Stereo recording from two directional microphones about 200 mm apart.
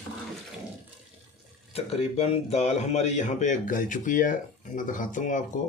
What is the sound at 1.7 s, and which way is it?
A man's voice, 30° left (ahead or behind).